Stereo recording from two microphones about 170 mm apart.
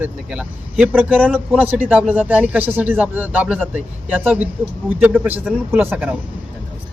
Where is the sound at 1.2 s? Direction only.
5° left (ahead or behind).